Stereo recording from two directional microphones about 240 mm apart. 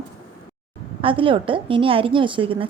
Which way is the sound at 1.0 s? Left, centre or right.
Right.